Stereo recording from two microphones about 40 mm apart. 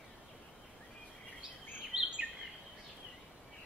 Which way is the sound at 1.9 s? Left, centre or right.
Centre.